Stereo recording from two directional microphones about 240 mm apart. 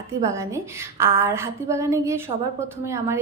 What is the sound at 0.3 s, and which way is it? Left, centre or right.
A woman's voice, centre.